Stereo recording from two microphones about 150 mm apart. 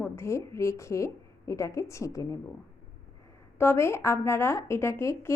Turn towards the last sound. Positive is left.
turn(degrees=20)  # may be behind; listen again after turning